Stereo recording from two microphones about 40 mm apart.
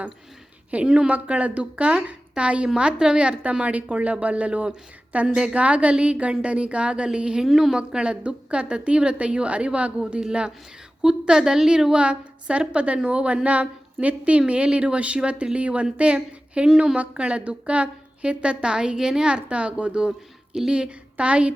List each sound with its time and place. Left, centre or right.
0.9 s a woman's voice: right
1.1 s a woman's voice: right
7.4 s a woman's voice: centre
7.8 s a woman's voice: right
11.9 s a woman's voice: right